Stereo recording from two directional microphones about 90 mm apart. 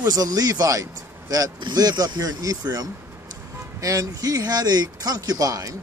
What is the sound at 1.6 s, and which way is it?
Speech, 50° right (ahead or behind).